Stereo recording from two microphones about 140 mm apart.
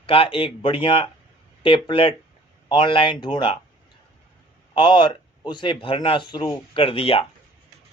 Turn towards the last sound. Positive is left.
turn(degrees=40)  # may be behind; listen again after turning